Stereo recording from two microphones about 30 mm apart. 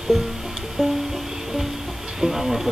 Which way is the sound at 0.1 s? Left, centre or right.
Centre.